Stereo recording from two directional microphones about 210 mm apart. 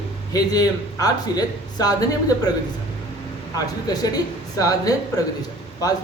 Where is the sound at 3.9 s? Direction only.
20° left (ahead or behind).